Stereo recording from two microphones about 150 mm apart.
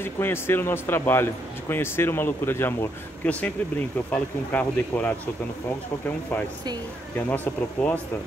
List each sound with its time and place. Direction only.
0.0 s speech: 15° left (ahead or behind)
7.2 s speech: 10° left (ahead or behind)